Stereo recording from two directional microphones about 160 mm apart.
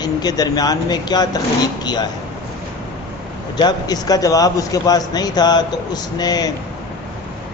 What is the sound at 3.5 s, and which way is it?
Speech, 25° left (ahead or behind).